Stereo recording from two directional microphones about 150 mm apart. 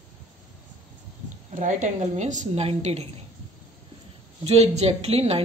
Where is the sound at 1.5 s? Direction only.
55° right (ahead or behind).